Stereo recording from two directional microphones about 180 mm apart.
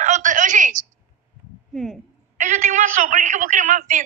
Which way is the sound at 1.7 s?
Centre (ahead or behind).